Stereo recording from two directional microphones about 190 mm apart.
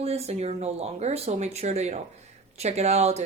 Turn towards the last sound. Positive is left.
turn(degrees=-35)  # may be behind; listen again after turning